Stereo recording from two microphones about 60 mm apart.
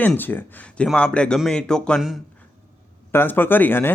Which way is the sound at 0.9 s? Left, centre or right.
Centre.